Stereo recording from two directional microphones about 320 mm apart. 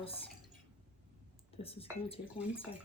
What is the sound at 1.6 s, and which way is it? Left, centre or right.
Speech, centre.